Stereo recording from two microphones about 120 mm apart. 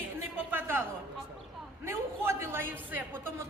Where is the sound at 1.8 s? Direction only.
20° right (ahead or behind).